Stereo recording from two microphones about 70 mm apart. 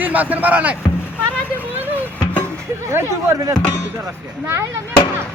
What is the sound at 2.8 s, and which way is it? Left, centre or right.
Speech, right.